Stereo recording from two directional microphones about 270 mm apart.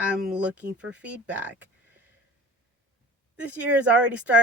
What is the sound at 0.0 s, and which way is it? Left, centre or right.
Speech, centre.